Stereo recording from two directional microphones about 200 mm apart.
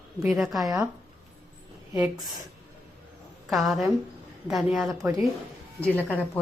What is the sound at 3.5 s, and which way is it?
Speech, centre (ahead or behind).